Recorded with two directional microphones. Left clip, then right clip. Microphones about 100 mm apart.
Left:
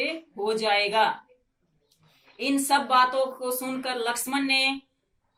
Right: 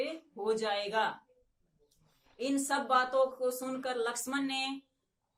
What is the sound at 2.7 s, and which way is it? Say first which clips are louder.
Speech: left 9 dB; 35° right (ahead or behind).